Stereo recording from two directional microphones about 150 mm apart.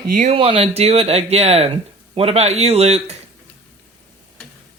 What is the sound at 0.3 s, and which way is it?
Speech, 40° right (ahead or behind).